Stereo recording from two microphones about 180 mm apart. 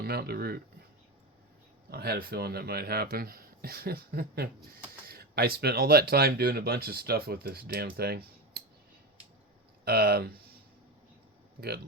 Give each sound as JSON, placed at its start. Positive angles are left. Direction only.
{"t": 0.0, "sound": "speech", "side_deg": -60}
{"t": 1.9, "sound": "speech", "side_deg": -60}
{"t": 9.8, "sound": "speech", "side_deg": -60}